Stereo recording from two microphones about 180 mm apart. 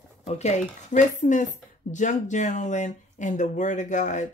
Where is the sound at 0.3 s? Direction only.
40° left (ahead or behind).